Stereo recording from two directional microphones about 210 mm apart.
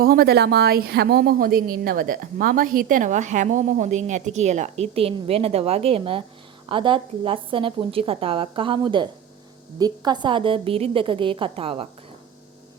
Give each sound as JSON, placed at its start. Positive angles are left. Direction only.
{"t": 0.0, "sound": "a woman's voice", "side_deg": -45}